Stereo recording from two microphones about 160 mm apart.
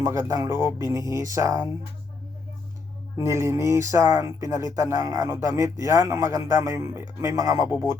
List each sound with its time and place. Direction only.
0.0 s speech: 20° right (ahead or behind)
3.2 s speech: 15° right (ahead or behind)